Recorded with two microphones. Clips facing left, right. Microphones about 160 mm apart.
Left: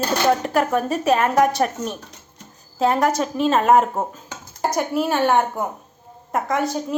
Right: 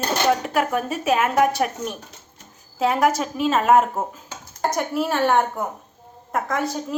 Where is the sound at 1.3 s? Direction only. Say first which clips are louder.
Left 2 dB; 5° right (ahead or behind).